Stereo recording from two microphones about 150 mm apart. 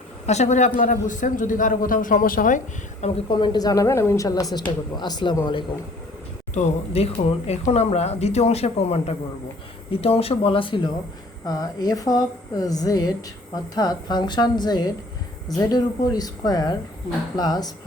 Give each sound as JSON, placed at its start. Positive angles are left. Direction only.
{"t": 0.3, "sound": "a man's voice", "side_deg": 50}
{"t": 3.2, "sound": "a woman's voice", "side_deg": 30}
{"t": 6.5, "sound": "a woman's voice", "side_deg": 45}